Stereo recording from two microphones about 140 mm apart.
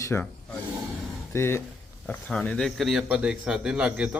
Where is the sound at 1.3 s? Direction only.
15° left (ahead or behind).